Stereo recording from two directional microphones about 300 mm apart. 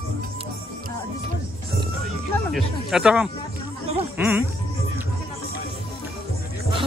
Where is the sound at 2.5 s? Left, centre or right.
Centre.